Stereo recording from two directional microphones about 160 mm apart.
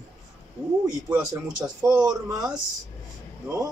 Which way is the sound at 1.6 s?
15° right (ahead or behind).